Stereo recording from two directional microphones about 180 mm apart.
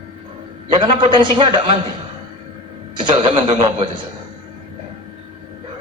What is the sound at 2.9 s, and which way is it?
Speech, 30° right (ahead or behind).